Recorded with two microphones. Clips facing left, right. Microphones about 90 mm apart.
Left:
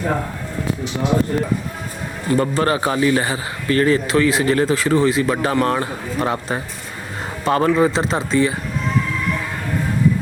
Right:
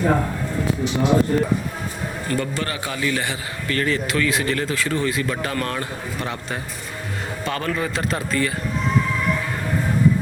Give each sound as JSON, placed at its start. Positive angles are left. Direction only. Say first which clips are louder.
{"t": 2.4, "sound": "a man's voice", "louder": "left 8 dB", "side_deg": 35}